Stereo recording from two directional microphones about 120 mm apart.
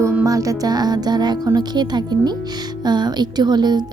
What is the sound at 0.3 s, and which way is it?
Speech, 30° right (ahead or behind).